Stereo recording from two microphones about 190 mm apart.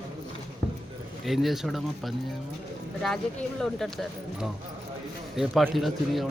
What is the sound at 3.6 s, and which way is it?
Speech, centre (ahead or behind).